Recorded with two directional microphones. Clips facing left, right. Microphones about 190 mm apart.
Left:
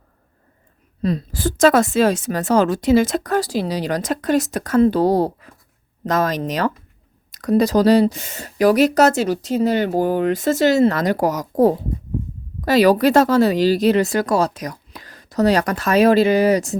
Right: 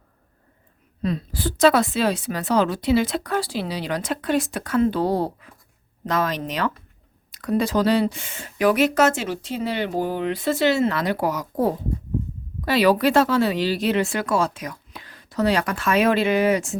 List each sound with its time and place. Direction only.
1.0 s a woman's voice: 40° left (ahead or behind)